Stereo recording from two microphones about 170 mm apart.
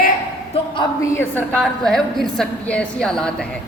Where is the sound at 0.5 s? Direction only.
30° left (ahead or behind).